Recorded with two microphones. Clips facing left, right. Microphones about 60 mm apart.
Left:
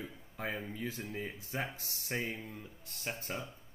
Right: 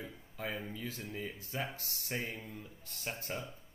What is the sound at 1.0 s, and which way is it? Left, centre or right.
Speech, centre.